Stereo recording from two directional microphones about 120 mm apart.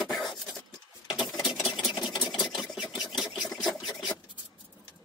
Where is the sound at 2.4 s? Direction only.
5° right (ahead or behind).